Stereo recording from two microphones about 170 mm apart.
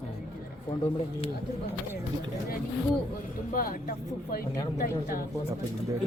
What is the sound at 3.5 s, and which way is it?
Speech, 55° left (ahead or behind).